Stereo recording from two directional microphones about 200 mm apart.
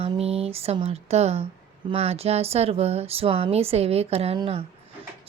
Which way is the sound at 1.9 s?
30° right (ahead or behind).